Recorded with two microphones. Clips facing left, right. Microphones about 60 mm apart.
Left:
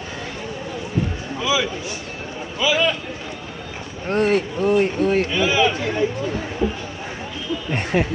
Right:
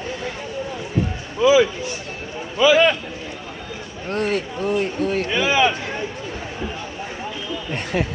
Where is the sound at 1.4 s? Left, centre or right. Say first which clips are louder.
Right 8 dB; right.